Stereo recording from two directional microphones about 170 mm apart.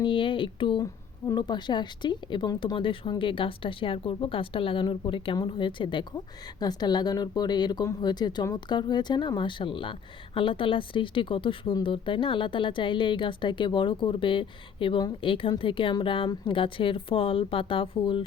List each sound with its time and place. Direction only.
0.0 s speech: 30° left (ahead or behind)